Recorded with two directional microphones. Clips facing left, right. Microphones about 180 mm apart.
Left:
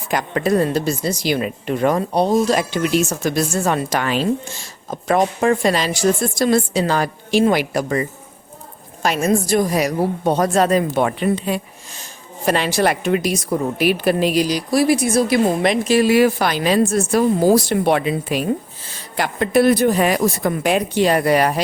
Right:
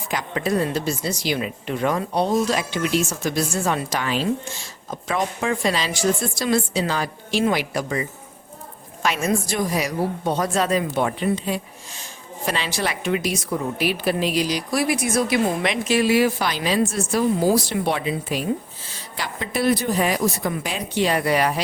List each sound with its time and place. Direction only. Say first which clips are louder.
0.1 s a woman's voice: left 5 dB; 50° left (ahead or behind)
4.9 s a woman's voice: left 7 dB; 45° left (ahead or behind)
9.0 s a woman's voice: left 5 dB; 40° left (ahead or behind)
13.8 s a woman's voice: left 6 dB; 55° left (ahead or behind)